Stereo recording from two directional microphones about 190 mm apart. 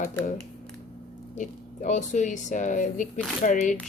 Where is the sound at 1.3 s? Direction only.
40° left (ahead or behind).